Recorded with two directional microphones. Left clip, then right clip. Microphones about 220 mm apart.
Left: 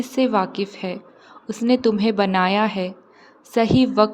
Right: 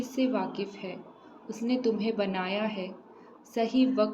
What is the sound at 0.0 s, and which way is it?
A woman's voice, 50° left (ahead or behind).